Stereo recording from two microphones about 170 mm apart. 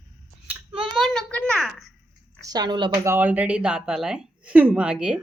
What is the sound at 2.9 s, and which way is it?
Speech, 15° right (ahead or behind).